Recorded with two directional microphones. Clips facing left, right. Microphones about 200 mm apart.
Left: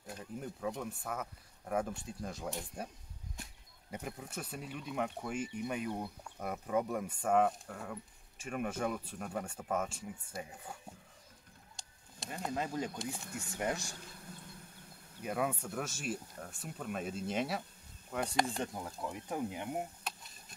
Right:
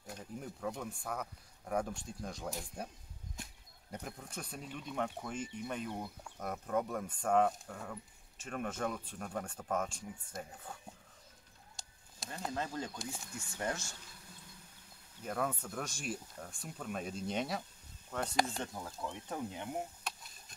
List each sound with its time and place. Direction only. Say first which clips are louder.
0.0 s speech: left 2 dB; centre (ahead or behind)
3.9 s speech: left 2 dB; 5° left (ahead or behind)
12.2 s a sound: left 2 dB; centre (ahead or behind)
12.5 s speech: left 3 dB; 15° left (ahead or behind)
13.2 s speech: left 3 dB; 60° left (ahead or behind)
13.5 s speech: left 2 dB; 15° left (ahead or behind)
15.2 s speech: left 2 dB; 10° left (ahead or behind)